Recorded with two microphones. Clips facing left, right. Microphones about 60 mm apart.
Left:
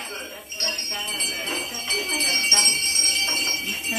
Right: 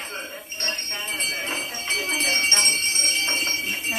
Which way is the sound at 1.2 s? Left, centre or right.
Right.